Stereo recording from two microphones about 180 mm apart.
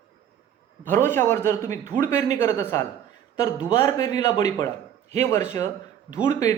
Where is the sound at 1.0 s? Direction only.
10° left (ahead or behind).